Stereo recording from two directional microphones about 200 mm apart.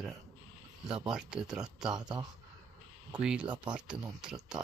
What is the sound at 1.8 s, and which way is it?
Speech, 20° right (ahead or behind).